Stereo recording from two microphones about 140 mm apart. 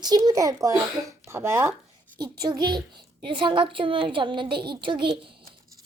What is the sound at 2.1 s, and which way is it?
A woman's voice, 30° right (ahead or behind).